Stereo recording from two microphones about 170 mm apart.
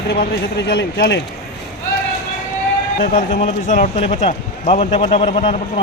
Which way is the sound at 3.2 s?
40° left (ahead or behind).